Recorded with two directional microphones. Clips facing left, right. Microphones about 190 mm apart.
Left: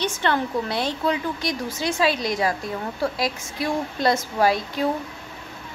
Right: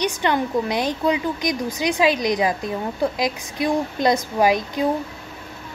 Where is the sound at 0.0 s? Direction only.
15° right (ahead or behind).